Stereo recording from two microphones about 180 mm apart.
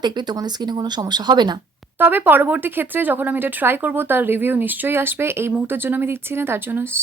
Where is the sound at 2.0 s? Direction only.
10° right (ahead or behind).